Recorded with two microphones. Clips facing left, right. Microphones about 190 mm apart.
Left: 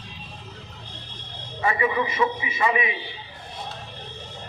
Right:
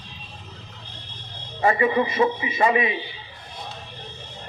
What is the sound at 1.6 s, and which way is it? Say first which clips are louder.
A man's voice: right 4 dB; 40° right (ahead or behind).